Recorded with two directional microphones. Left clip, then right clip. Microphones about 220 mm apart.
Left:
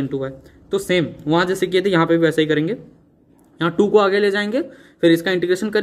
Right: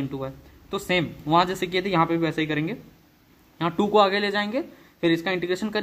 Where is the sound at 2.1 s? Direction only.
65° right (ahead or behind).